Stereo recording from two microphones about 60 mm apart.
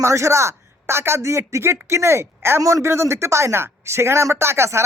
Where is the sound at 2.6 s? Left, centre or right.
Right.